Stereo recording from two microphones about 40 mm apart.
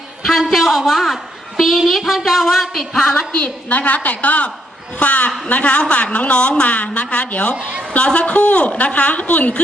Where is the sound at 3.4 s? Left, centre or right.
Left.